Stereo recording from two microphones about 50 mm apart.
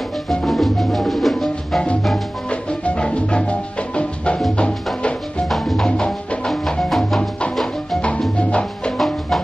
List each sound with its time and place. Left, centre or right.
0.5 s music: centre
2.5 s music: left
5.5 s music: centre
5.9 s music: centre
6.5 s music: centre
8.4 s music: left
8.9 s music: centre